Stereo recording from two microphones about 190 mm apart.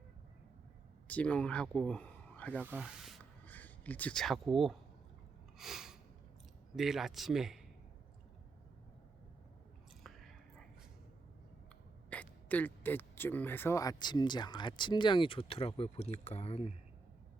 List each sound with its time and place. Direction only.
1.0 s speech: 5° left (ahead or behind)
2.6 s speech: 5° right (ahead or behind)
3.4 s speech: 10° left (ahead or behind)
5.5 s a sound: centre (ahead or behind)
6.7 s speech: centre (ahead or behind)
10.0 s whispering: centre (ahead or behind)
12.1 s speech: 10° left (ahead or behind); by 16.7 s 35° left (ahead or behind)